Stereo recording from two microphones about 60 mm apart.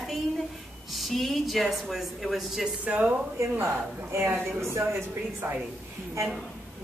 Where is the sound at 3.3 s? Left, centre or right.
Right.